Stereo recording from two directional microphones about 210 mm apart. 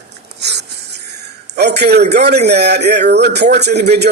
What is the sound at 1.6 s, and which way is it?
A man's voice, 50° right (ahead or behind).